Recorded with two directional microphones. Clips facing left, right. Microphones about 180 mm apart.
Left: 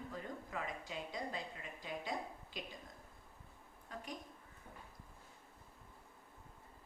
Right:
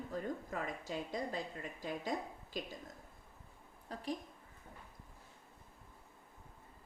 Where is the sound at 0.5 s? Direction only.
45° right (ahead or behind).